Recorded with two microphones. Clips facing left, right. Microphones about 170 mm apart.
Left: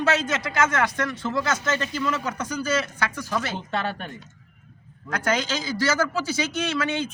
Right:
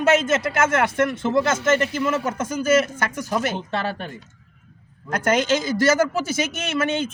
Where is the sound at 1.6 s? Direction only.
70° right (ahead or behind).